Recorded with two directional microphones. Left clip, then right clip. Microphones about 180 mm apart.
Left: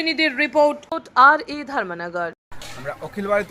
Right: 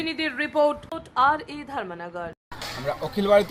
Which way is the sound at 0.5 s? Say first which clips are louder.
Left 3 dB; 5° left (ahead or behind).